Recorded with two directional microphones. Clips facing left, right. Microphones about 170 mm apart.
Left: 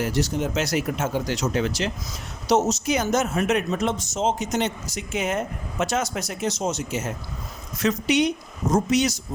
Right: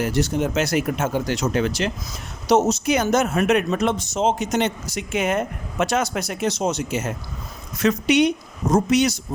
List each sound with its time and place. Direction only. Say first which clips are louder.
0.0 s speech: right 3 dB; 55° right (ahead or behind)